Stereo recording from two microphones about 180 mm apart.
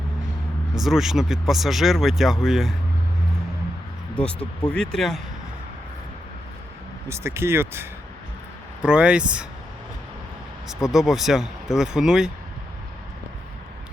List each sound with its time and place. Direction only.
0.8 s speech: centre (ahead or behind)
4.1 s speech: 5° left (ahead or behind)
7.1 s speech: 15° right (ahead or behind)
10.9 s speech: centre (ahead or behind)